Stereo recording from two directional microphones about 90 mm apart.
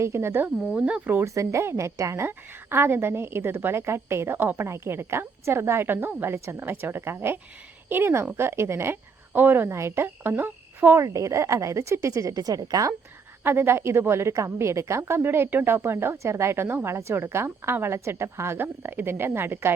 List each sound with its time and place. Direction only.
0.0 s a woman's voice: 30° right (ahead or behind)
0.4 s speech: 15° right (ahead or behind)
1.1 s a woman's voice: 35° right (ahead or behind); by 10.9 s 20° right (ahead or behind)
10.9 s a woman's voice: 35° right (ahead or behind)
13.4 s a woman's voice: 25° right (ahead or behind)